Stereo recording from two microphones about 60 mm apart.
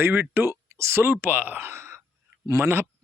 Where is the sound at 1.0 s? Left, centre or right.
Right.